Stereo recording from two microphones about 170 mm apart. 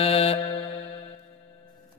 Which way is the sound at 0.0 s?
35° left (ahead or behind).